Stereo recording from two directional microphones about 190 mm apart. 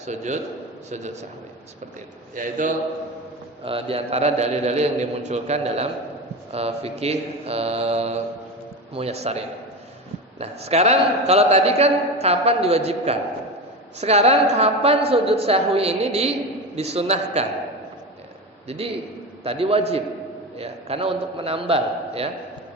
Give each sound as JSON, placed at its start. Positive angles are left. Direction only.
{"t": 0.0, "sound": "a man's voice", "side_deg": -40}
{"t": 2.3, "sound": "a man's voice", "side_deg": -45}
{"t": 3.6, "sound": "a man's voice", "side_deg": -30}
{"t": 18.7, "sound": "a man's voice", "side_deg": -35}